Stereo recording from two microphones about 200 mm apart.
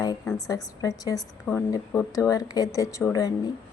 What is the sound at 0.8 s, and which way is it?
Speech, 15° left (ahead or behind).